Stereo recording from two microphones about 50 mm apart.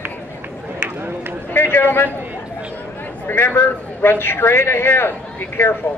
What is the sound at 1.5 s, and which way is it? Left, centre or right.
Speech, left.